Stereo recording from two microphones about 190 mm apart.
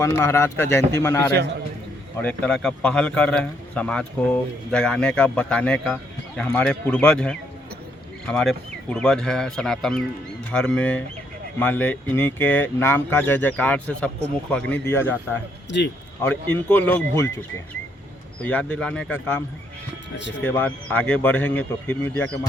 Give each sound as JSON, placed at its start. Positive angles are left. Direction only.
{"t": 0.0, "sound": "a man's voice", "side_deg": 15}
{"t": 18.4, "sound": "speech", "side_deg": 5}
{"t": 20.4, "sound": "speech", "side_deg": 10}